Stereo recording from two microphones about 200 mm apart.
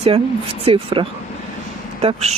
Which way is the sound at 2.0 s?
30° right (ahead or behind).